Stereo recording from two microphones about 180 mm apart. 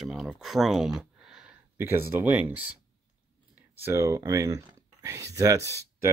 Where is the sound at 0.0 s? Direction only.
Centre (ahead or behind).